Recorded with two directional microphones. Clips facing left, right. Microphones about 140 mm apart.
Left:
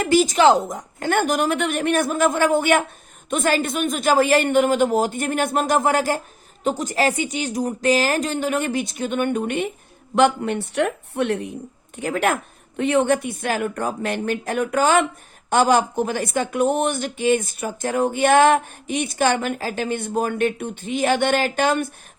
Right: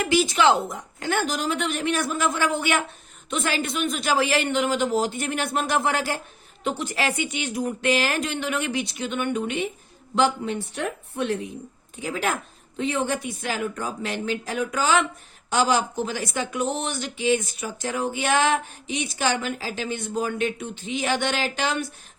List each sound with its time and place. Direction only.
0.1 s speech: 40° left (ahead or behind)
10.2 s speech: 65° left (ahead or behind)